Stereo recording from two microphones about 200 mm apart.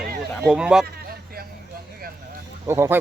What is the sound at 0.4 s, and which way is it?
Speech, 5° right (ahead or behind).